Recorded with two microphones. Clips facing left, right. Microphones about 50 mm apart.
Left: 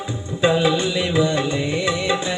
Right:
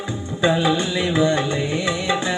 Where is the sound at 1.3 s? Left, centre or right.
Right.